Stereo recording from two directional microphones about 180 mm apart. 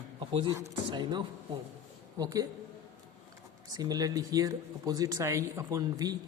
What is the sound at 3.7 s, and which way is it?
A man's voice, 20° right (ahead or behind).